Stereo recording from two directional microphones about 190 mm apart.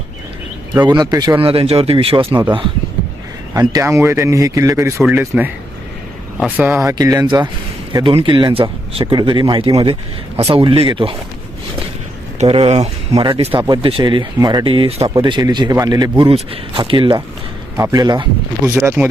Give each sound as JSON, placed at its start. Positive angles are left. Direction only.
{"t": 0.7, "sound": "speech", "side_deg": -20}
{"t": 1.4, "sound": "speech", "side_deg": -30}
{"t": 12.4, "sound": "speech", "side_deg": -30}